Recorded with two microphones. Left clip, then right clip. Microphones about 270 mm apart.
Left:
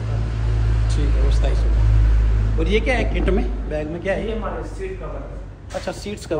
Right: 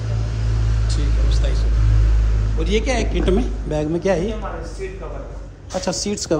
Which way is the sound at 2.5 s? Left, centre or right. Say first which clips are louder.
Left 1 dB; centre.